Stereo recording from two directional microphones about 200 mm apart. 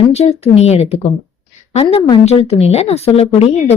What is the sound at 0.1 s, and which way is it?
A woman's voice, 30° left (ahead or behind).